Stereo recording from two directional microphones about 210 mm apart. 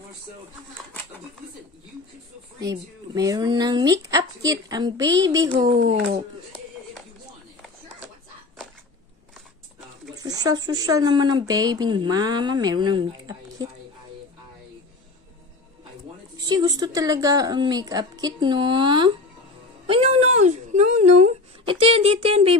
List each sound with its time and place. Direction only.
2.6 s speech: 15° right (ahead or behind)
10.1 s a woman's voice: 20° right (ahead or behind)
16.3 s a woman's voice: 20° right (ahead or behind)